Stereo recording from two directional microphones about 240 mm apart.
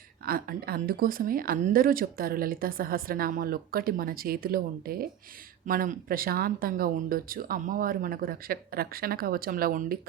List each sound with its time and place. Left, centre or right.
0.3 s speech: right